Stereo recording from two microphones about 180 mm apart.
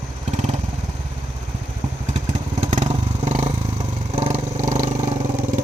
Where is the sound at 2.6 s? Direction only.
40° right (ahead or behind).